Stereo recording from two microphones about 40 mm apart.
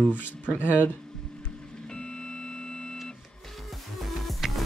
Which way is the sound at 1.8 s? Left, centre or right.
Left.